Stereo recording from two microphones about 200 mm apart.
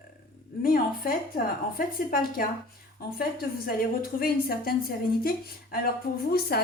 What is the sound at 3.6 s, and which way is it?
A woman's voice, 50° left (ahead or behind).